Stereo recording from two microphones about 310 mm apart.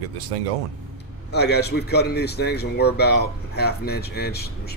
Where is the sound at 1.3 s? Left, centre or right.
Left.